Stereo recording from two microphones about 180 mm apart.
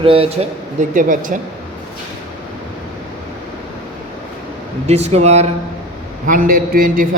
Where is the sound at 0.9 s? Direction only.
50° right (ahead or behind).